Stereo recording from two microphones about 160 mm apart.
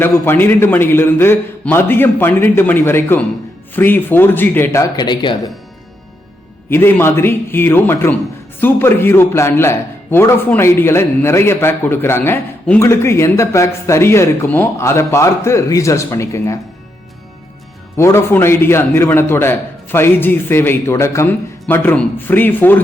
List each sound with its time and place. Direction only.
0.0 s a man's voice: 15° left (ahead or behind); by 5.4 s 30° left (ahead or behind)
6.7 s a man's voice: 15° left (ahead or behind)
17.9 s a man's voice: 15° left (ahead or behind)